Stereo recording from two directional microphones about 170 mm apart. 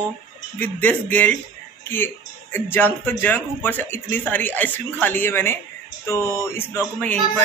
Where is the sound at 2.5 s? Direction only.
15° left (ahead or behind).